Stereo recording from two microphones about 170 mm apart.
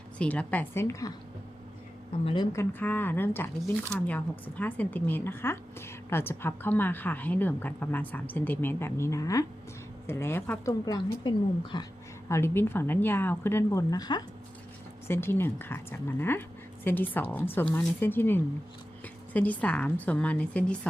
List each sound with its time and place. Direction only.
0.2 s speech: 10° left (ahead or behind)
2.2 s a woman's voice: 25° left (ahead or behind)
12.3 s speech: 15° left (ahead or behind)